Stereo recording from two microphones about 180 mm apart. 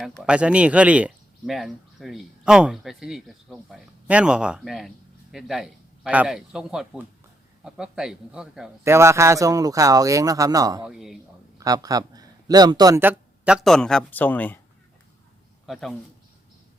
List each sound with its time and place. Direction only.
0.0 s speech: 5° right (ahead or behind)
8.8 s speech: 15° right (ahead or behind)
10.8 s speech: centre (ahead or behind)
11.5 s a man's voice: 20° right (ahead or behind); by 14.6 s 10° left (ahead or behind)
15.6 s speech: centre (ahead or behind)